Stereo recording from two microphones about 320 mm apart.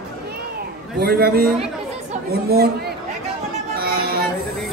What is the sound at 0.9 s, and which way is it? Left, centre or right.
Speech, right.